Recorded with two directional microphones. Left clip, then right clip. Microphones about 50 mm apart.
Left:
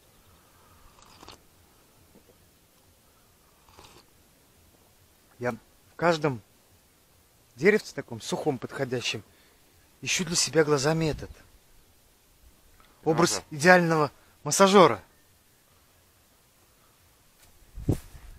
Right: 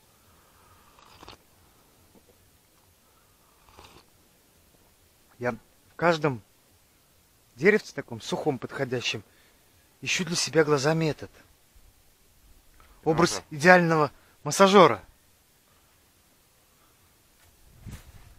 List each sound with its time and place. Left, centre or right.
0.9 s biting: right
3.7 s biting: right
5.4 s speech: right
7.5 s speech: right
13.0 s speech: right